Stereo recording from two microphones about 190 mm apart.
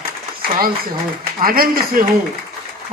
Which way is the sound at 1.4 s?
50° right (ahead or behind).